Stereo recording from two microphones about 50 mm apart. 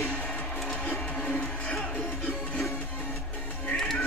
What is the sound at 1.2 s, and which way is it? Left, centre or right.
Music, centre.